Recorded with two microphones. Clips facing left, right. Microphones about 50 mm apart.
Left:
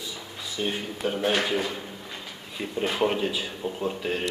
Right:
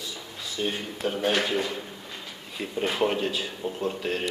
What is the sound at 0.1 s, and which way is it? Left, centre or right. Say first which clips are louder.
A man's voice: even; centre.